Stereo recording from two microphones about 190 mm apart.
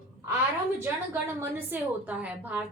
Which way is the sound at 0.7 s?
10° right (ahead or behind).